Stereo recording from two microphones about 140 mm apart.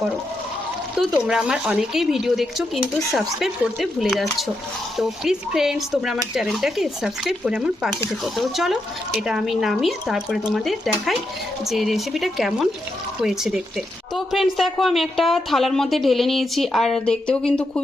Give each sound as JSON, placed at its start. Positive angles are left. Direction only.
{"t": 1.3, "sound": "a woman's voice", "side_deg": -5}